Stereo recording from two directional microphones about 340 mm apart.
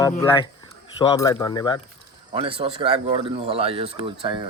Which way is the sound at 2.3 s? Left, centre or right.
Centre.